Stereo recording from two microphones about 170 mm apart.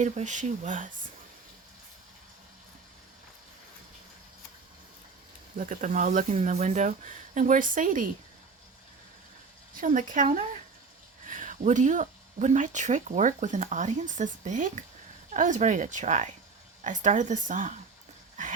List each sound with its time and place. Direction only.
0.0 s speech: 45° right (ahead or behind)
5.5 s speech: 50° right (ahead or behind)
9.7 s speech: 50° right (ahead or behind)